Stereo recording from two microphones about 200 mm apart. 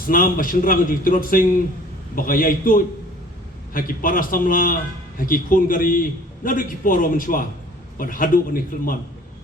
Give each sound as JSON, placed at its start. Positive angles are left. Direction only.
{"t": 0.1, "sound": "a man's voice", "side_deg": 45}